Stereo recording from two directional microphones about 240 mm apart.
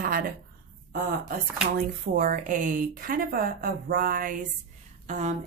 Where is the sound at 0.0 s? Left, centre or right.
Right.